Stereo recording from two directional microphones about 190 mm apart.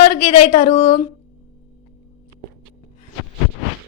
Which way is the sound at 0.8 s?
30° left (ahead or behind).